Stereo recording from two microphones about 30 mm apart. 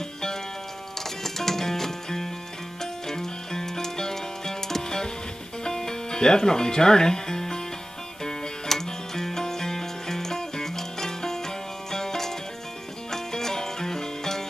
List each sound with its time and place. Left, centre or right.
1.2 s music: centre